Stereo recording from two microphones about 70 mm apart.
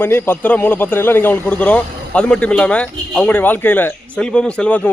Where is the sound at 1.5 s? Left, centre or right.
Centre.